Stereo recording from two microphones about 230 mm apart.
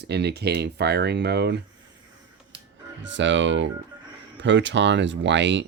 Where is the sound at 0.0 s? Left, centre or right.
Right.